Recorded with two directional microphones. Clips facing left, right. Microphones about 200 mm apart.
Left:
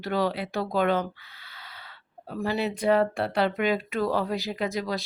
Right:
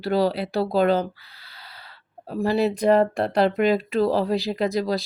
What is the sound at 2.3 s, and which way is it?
Speech, 35° right (ahead or behind).